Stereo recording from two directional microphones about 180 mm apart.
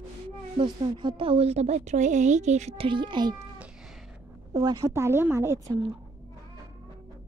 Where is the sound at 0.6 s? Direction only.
25° right (ahead or behind).